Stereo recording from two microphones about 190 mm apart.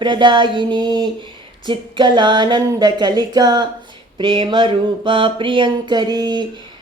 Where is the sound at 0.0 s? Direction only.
25° right (ahead or behind).